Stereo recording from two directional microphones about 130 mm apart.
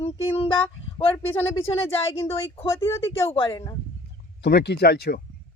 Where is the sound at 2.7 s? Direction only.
20° left (ahead or behind).